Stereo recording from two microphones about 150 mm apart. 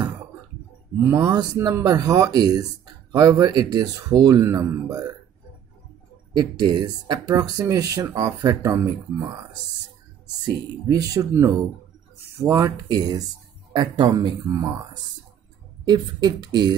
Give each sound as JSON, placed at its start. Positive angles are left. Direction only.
{"t": 1.0, "sound": "speech", "side_deg": -20}
{"t": 6.3, "sound": "speech", "side_deg": -25}
{"t": 10.9, "sound": "speech", "side_deg": -25}
{"t": 15.8, "sound": "speech", "side_deg": -30}